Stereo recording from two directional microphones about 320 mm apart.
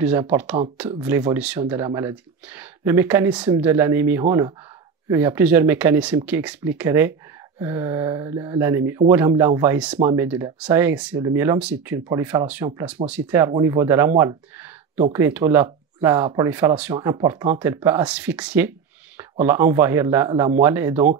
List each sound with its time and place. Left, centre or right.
0.0 s speech: centre